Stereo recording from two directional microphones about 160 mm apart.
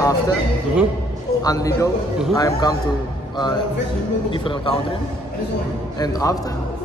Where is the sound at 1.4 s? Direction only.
25° left (ahead or behind).